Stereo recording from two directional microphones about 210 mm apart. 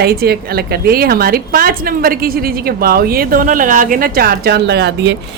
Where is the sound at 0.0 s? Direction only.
50° right (ahead or behind).